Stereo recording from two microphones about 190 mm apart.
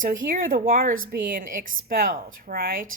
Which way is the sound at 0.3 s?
45° right (ahead or behind).